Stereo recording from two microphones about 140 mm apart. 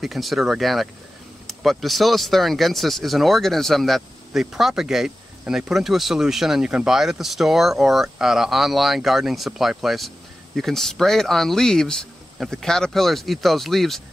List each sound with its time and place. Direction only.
0.0 s speech: centre (ahead or behind)